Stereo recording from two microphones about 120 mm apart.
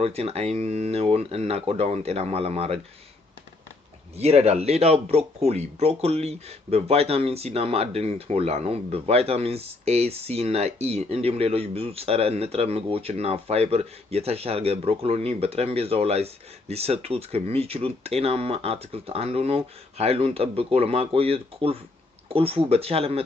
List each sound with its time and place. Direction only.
0.0 s speech: 55° right (ahead or behind)
4.2 s speech: 60° right (ahead or behind)